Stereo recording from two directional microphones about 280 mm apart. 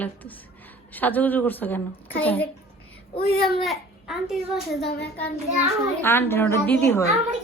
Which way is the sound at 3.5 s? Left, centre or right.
Centre.